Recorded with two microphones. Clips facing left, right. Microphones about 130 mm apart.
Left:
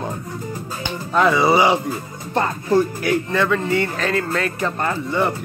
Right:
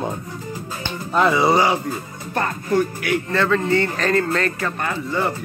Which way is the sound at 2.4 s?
30° left (ahead or behind).